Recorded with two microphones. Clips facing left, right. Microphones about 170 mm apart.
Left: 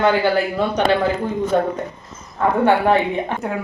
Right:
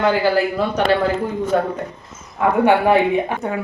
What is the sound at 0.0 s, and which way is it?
Speech, 5° right (ahead or behind).